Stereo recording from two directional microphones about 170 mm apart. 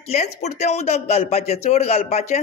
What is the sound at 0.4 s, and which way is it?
A man's voice, 40° left (ahead or behind).